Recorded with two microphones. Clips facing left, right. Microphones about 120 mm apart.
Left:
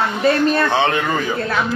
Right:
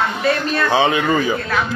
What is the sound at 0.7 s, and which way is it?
Speech, centre (ahead or behind).